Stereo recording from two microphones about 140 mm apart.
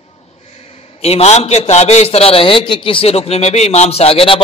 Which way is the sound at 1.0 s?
50° left (ahead or behind).